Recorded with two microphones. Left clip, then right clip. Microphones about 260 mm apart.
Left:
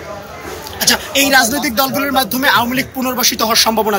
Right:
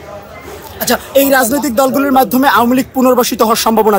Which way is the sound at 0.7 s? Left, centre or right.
Right.